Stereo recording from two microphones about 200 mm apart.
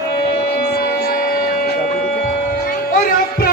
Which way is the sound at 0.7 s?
50° left (ahead or behind).